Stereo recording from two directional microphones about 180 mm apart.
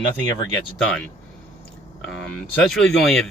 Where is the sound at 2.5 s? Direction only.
5° left (ahead or behind).